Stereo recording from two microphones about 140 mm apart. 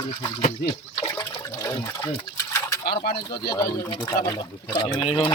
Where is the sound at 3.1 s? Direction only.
90° left.